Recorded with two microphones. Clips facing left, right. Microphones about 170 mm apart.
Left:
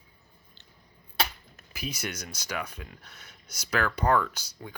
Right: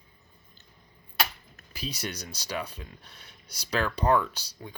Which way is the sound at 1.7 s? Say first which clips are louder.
Even; 35° right (ahead or behind).